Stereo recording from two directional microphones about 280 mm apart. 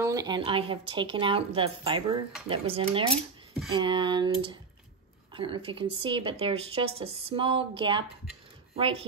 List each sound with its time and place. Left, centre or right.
0.0 s speech: centre